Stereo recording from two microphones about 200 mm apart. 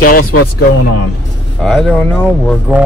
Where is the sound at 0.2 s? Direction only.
90° left.